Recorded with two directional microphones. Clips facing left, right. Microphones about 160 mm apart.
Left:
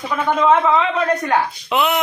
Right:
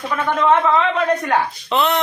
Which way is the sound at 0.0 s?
5° left (ahead or behind).